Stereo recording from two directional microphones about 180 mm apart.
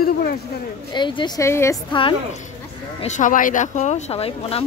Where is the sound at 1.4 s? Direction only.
15° left (ahead or behind).